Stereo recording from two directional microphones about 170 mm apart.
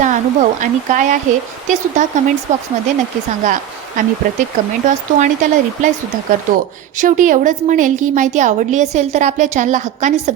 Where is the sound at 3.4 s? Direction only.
45° right (ahead or behind).